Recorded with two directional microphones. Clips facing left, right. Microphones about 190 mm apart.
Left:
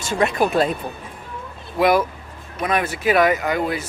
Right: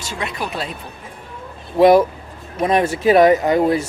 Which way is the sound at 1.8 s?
30° right (ahead or behind).